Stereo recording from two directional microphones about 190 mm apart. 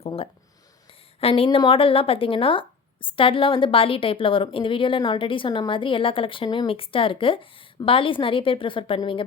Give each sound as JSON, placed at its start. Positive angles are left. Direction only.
{"t": 0.0, "sound": "a woman's voice", "side_deg": 30}